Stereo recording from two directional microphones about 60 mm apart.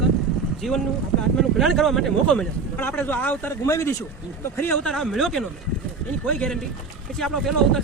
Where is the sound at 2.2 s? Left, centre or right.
Centre.